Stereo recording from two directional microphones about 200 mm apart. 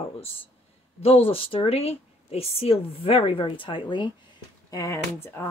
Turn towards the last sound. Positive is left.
turn(degrees=15)  # may be behind; listen again after turning